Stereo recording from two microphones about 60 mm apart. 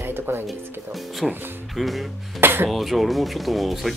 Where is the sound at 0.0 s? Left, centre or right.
Right.